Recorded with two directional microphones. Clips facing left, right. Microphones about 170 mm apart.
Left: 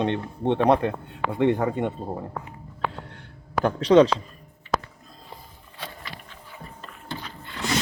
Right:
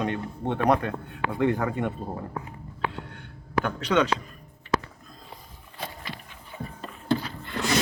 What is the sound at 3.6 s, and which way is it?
Speech, 35° left (ahead or behind).